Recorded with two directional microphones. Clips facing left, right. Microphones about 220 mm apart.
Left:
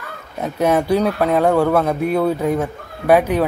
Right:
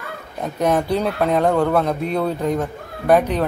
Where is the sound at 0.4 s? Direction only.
5° left (ahead or behind).